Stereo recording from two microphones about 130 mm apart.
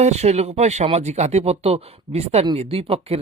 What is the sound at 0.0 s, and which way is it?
Speech, 60° right (ahead or behind).